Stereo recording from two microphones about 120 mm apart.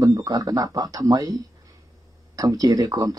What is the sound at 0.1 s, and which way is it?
Speech, 30° right (ahead or behind).